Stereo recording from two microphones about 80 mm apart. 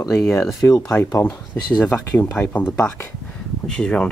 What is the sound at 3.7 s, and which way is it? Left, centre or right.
Speech, centre.